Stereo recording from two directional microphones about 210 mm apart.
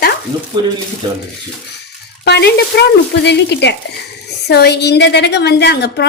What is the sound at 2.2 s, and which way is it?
A woman's voice, 50° left (ahead or behind).